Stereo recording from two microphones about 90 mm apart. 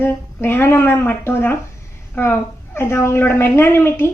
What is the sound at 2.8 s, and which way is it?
A woman's voice, 25° left (ahead or behind).